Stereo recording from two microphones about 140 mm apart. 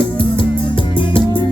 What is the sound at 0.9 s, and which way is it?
Music, 35° left (ahead or behind).